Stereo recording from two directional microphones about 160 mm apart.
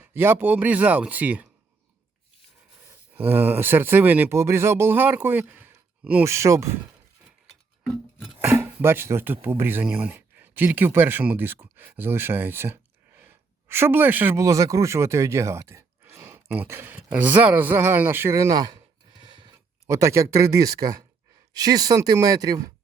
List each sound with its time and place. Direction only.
0.0 s speech: 15° right (ahead or behind)
3.2 s speech: 10° right (ahead or behind)
7.9 s music: centre (ahead or behind)
8.4 s speech: 15° right (ahead or behind); by 19.5 s 30° right (ahead or behind)
19.9 s speech: 20° right (ahead or behind)